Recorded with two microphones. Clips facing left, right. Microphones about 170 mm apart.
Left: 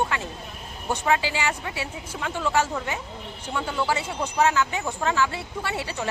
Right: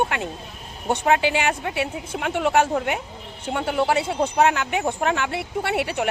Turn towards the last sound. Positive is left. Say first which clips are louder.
# right 6 dB
turn(degrees=-65)  # may be behind; listen again after turning